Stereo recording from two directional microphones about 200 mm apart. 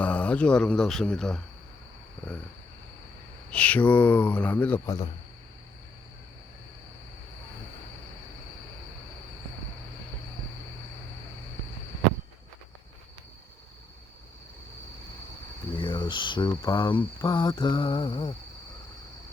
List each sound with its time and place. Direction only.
0.0 s speech: 5° left (ahead or behind)
3.5 s speech: 5° left (ahead or behind)
15.8 s speech: 25° left (ahead or behind)
17.0 s mantra: 20° left (ahead or behind)